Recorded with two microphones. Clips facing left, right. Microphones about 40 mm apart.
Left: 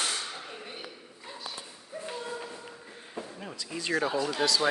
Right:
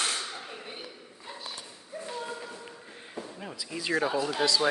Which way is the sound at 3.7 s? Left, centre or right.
Centre.